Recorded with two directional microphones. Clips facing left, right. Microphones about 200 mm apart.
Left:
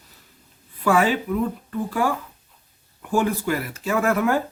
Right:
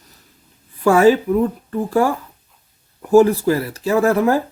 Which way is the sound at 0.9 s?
40° right (ahead or behind).